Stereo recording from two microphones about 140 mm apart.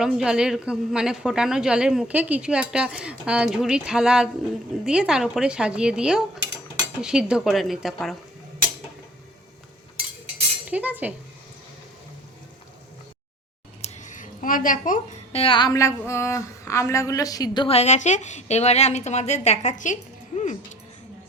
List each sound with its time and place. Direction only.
0.0 s a woman's voice: 5° right (ahead or behind)
10.7 s speech: 10° right (ahead or behind)
13.8 s a sound: 60° left (ahead or behind); by 15.0 s 75° left (ahead or behind)
15.3 s speech: 40° left (ahead or behind)
15.7 s a woman's voice: 20° left (ahead or behind)
17.7 s a woman's voice: 50° left (ahead or behind)